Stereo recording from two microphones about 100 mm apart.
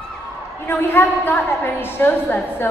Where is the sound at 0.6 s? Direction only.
25° left (ahead or behind).